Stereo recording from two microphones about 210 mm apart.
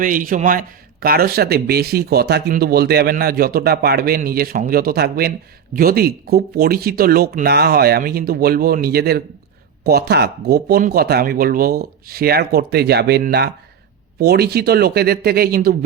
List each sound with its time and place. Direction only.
0.0 s a man's voice: 40° right (ahead or behind)